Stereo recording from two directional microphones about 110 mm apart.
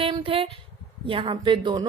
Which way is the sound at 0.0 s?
55° right (ahead or behind).